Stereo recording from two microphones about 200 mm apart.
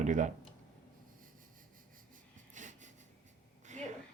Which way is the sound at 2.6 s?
40° right (ahead or behind).